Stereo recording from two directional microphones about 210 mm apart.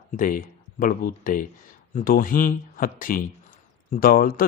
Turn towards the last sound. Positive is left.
turn(degrees=45)  # may be behind; listen again after turning